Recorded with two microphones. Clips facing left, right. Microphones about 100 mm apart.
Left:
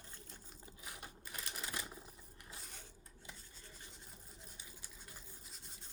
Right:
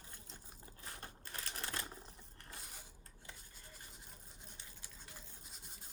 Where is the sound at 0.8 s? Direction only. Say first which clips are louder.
Right 1 dB; 10° left (ahead or behind).